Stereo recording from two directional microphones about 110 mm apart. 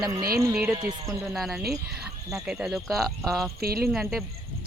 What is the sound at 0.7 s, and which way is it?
Speech, 45° right (ahead or behind).